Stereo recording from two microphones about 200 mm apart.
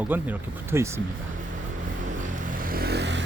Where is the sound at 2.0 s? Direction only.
40° right (ahead or behind); by 3.2 s 60° right (ahead or behind).